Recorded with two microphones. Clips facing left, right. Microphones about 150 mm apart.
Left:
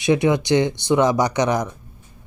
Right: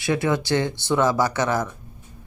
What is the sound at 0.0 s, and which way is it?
A man's voice, 20° left (ahead or behind).